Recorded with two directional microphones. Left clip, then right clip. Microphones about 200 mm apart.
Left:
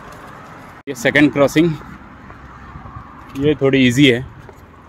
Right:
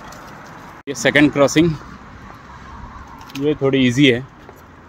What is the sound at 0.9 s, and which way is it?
Speech, 5° left (ahead or behind).